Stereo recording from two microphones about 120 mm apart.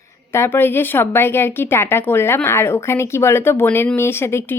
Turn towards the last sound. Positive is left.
turn(degrees=20)  # may be behind; listen again after turning